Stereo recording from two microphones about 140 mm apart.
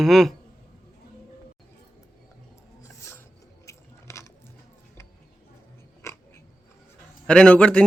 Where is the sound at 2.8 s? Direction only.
20° left (ahead or behind).